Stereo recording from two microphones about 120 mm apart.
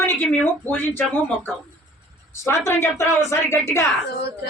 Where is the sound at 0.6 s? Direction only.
15° left (ahead or behind).